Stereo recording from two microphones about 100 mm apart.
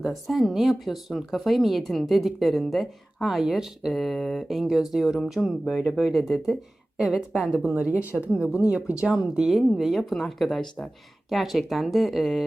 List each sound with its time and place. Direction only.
0.0 s speech: centre (ahead or behind)